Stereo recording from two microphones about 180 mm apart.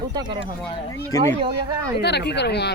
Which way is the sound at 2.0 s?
70° left (ahead or behind).